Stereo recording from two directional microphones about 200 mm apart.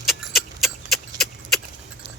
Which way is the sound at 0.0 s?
Centre (ahead or behind).